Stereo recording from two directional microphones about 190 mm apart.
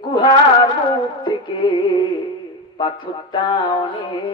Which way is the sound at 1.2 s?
25° left (ahead or behind).